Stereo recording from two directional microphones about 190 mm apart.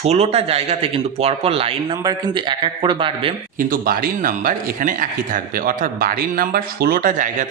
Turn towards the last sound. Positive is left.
turn(degrees=-45)  # may be behind; listen again after turning